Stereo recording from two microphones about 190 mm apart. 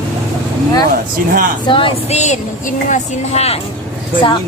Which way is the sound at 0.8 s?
50° right (ahead or behind).